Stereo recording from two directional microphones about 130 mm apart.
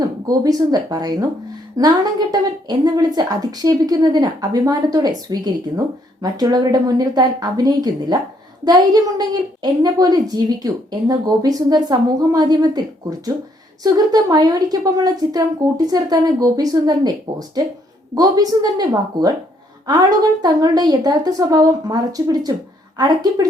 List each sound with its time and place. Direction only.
0.0 s a woman's voice: 30° right (ahead or behind)